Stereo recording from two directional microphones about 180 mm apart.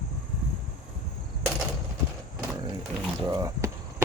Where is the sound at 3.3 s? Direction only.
20° right (ahead or behind).